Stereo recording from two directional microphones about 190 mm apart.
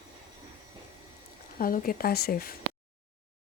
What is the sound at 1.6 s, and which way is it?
Speech, 50° left (ahead or behind).